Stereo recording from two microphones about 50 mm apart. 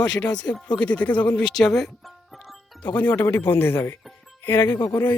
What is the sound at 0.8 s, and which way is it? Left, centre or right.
Speech, left.